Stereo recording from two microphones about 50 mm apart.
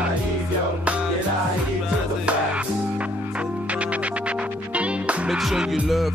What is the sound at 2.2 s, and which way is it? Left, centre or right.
Music, right.